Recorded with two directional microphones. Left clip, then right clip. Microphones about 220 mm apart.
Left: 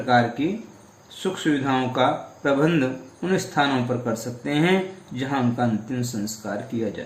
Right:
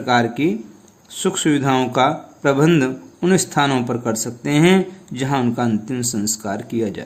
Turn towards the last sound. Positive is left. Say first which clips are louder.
# right 4 dB
turn(degrees=-50)  # may be behind; listen again after turning